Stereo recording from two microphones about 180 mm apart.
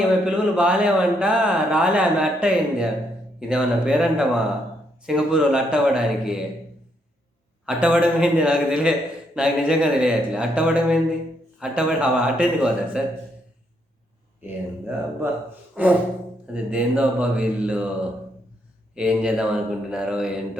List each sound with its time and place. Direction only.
0.3 s a man's voice: 5° right (ahead or behind)
7.6 s a man's voice: 5° right (ahead or behind)
14.4 s speech: 10° right (ahead or behind)
18.9 s a man's voice: 5° right (ahead or behind)